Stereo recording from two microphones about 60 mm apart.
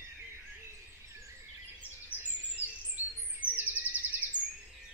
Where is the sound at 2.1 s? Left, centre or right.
Right.